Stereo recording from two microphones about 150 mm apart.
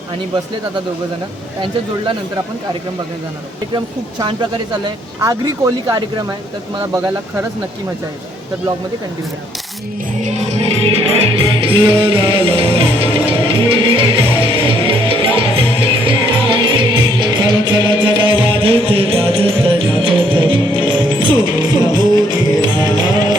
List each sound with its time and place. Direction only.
5.9 s speech: 25° right (ahead or behind)
10.2 s music: 45° right (ahead or behind); by 23.4 s 30° right (ahead or behind)